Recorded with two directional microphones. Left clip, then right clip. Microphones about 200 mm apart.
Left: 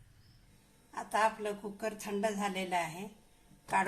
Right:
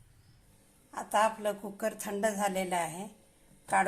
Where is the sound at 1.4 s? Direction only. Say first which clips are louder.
Right 4 dB; 25° right (ahead or behind).